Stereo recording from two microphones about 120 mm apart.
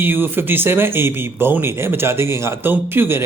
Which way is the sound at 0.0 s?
20° right (ahead or behind).